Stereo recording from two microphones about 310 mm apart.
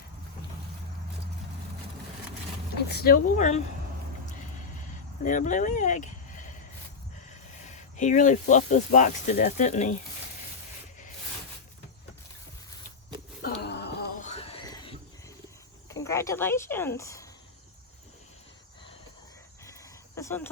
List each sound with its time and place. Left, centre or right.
2.9 s speech: left
5.2 s speech: left
7.7 s speech: left
13.4 s a sound: left; by 14.9 s centre
15.9 s speech: centre
19.6 s cricket: centre